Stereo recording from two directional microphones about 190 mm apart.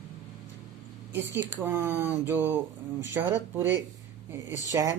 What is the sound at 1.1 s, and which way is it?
Speech, 10° right (ahead or behind).